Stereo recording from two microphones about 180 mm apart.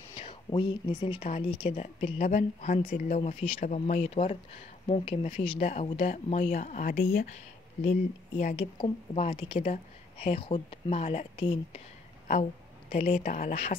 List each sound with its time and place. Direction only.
0.1 s speech: 30° left (ahead or behind)
3.6 s speech: 45° left (ahead or behind)
8.5 s speech: 30° left (ahead or behind)
12.9 s speech: 35° left (ahead or behind)